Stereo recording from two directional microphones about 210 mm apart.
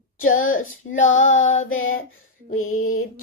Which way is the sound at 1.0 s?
35° left (ahead or behind).